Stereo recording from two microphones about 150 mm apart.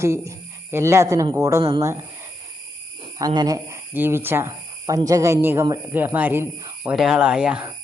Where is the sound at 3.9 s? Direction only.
15° right (ahead or behind).